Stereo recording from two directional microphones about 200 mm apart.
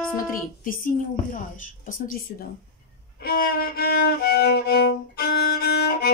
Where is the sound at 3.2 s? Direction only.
50° left (ahead or behind).